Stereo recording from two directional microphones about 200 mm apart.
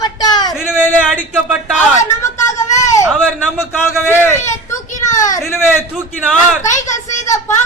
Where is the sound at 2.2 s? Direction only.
15° left (ahead or behind).